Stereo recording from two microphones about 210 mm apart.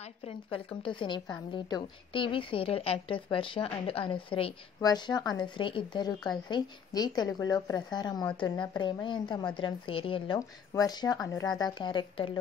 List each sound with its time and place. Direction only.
0.8 s a woman's voice: 20° left (ahead or behind)